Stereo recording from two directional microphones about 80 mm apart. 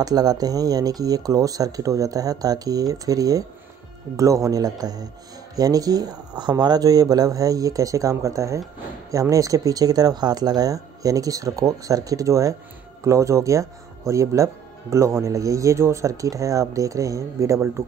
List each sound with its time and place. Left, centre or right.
0.0 s speech: right